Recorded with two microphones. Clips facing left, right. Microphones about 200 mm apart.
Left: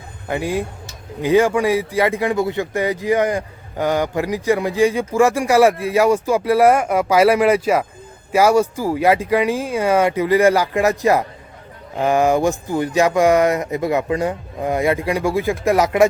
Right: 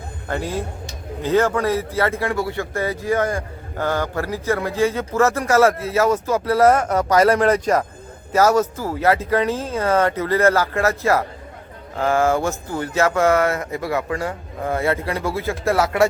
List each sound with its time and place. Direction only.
0.3 s speech: 15° left (ahead or behind)